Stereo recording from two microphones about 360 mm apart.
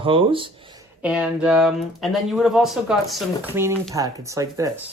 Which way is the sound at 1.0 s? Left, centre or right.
Centre.